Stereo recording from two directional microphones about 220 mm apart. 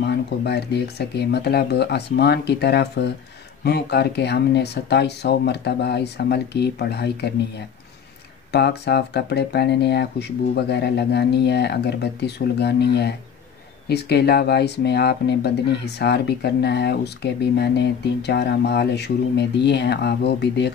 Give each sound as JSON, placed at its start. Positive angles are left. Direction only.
{"t": 0.0, "sound": "speech", "side_deg": 50}
{"t": 8.5, "sound": "speech", "side_deg": 50}